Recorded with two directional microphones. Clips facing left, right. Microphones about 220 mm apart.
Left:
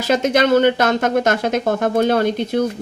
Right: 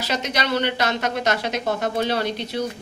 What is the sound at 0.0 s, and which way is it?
Speech, 50° left (ahead or behind).